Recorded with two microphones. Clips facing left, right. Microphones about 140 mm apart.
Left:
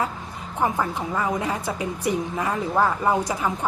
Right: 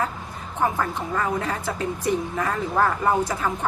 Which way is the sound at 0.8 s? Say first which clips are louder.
Even; 15° left (ahead or behind).